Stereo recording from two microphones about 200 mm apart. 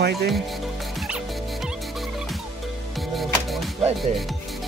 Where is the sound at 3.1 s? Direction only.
Centre (ahead or behind).